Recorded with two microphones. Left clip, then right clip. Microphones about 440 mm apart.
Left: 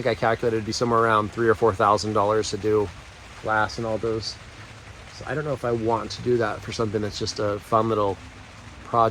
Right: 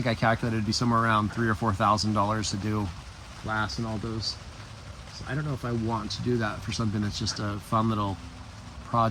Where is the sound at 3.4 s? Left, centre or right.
Left.